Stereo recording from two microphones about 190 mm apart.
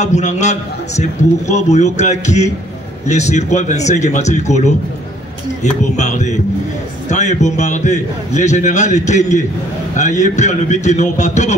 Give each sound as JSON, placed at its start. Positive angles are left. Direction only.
{"t": 0.0, "sound": "a man's voice", "side_deg": 40}